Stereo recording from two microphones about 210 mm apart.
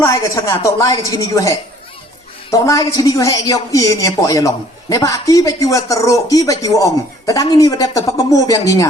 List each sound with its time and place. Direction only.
0.0 s a woman's voice: 15° left (ahead or behind)